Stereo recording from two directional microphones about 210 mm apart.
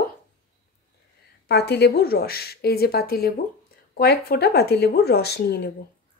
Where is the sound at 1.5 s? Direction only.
50° left (ahead or behind).